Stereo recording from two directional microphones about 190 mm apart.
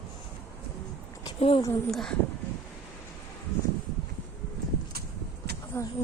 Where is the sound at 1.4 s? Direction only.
30° left (ahead or behind).